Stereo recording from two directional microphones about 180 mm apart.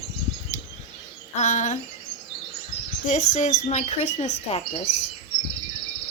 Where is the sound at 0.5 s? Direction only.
40° left (ahead or behind).